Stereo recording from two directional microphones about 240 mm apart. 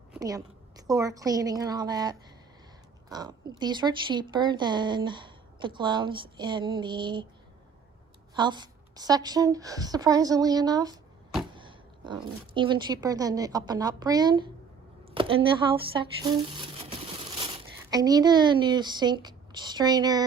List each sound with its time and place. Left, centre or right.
0.2 s a woman's voice: centre
8.4 s a woman's voice: centre
15.1 s a sound: right
17.9 s a woman's voice: centre